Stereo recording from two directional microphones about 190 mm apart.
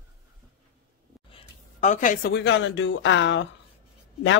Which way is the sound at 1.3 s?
40° left (ahead or behind).